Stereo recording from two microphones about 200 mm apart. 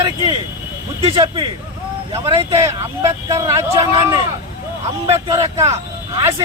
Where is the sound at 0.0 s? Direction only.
15° right (ahead or behind).